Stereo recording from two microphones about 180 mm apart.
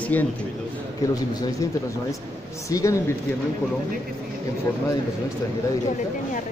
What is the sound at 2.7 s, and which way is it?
Speech, 15° left (ahead or behind).